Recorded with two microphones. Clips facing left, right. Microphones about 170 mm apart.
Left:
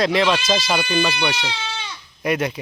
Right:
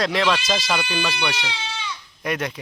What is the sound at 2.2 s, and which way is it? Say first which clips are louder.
Speech: left 4 dB; 5° left (ahead or behind).